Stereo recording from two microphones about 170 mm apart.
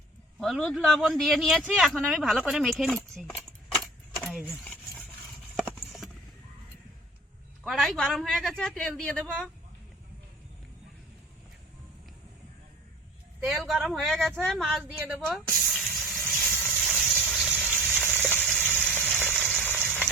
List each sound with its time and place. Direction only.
0.3 s speech: centre (ahead or behind)
4.4 s a sound: 5° left (ahead or behind)
7.6 s speech: centre (ahead or behind)
13.4 s speech: centre (ahead or behind)
14.9 s speech: 10° right (ahead or behind)
15.5 s water: centre (ahead or behind)
16.6 s a sound: 5° right (ahead or behind)
18.6 s water: 10° left (ahead or behind)
18.9 s water: 10° right (ahead or behind)
19.3 s frying: 5° left (ahead or behind)